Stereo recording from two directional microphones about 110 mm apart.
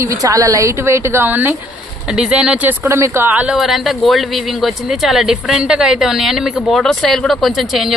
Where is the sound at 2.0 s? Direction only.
5° right (ahead or behind).